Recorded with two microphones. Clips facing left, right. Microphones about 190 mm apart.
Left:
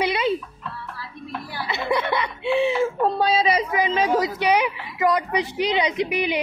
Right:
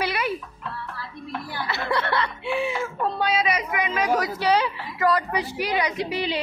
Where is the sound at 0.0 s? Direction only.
20° left (ahead or behind).